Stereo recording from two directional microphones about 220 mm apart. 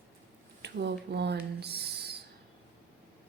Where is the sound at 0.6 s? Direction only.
50° right (ahead or behind).